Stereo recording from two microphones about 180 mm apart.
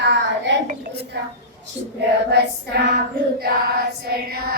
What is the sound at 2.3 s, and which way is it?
Female singing, 70° right (ahead or behind).